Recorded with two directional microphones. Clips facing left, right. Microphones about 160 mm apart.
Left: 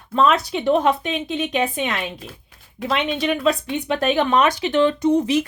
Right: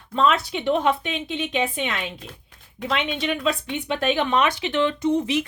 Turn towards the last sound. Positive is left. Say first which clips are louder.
# left 4 dB
turn(degrees=40)  # may be behind; listen again after turning